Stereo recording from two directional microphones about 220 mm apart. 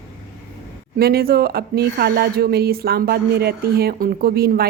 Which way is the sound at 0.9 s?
45° right (ahead or behind).